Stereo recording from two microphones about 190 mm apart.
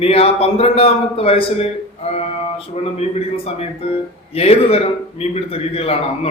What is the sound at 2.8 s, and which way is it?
A man's voice, 35° left (ahead or behind).